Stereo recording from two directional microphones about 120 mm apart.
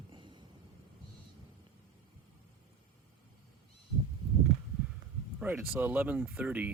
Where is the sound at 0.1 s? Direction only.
40° right (ahead or behind).